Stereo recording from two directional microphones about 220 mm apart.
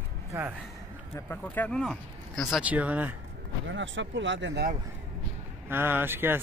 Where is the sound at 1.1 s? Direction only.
10° left (ahead or behind); by 3.2 s 5° right (ahead or behind).